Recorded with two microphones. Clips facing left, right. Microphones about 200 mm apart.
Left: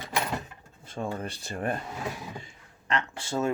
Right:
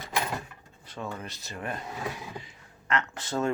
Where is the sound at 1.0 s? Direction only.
45° left (ahead or behind).